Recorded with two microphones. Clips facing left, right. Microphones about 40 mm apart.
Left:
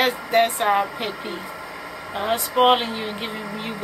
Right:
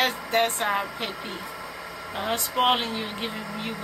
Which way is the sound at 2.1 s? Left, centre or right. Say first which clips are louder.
Left 5 dB; centre.